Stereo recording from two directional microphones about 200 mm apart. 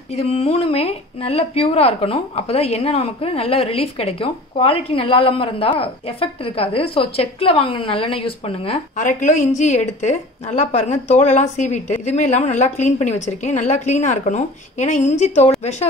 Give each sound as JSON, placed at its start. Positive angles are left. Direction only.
{"t": 0.1, "sound": "a woman's voice", "side_deg": 30}